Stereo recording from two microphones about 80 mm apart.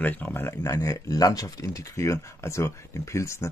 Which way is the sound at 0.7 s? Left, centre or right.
Left.